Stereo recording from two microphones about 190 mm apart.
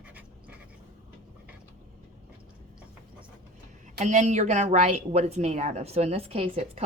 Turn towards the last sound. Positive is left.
turn(degrees=-30)  # may be behind; listen again after turning